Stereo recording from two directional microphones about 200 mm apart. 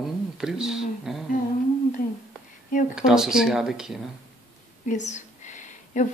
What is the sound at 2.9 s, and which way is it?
Speech, 5° right (ahead or behind).